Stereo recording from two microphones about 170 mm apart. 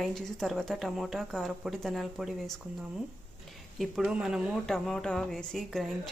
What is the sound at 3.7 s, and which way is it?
Speech, centre (ahead or behind).